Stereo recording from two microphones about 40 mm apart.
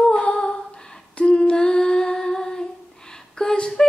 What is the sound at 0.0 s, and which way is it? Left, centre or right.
Humming, left.